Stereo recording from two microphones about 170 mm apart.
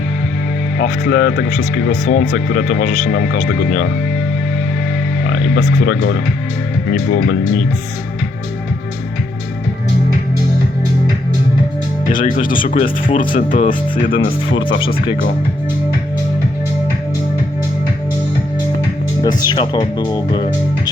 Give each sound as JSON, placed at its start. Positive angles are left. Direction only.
{"t": 0.8, "sound": "speech", "side_deg": 75}
{"t": 5.3, "sound": "speech", "side_deg": 90}
{"t": 7.1, "sound": "speech", "side_deg": 65}
{"t": 12.1, "sound": "speech", "side_deg": 55}
{"t": 12.7, "sound": "speech", "side_deg": 30}
{"t": 13.3, "sound": "speech", "side_deg": 50}
{"t": 13.7, "sound": "speech", "side_deg": 30}
{"t": 19.2, "sound": "speech", "side_deg": 25}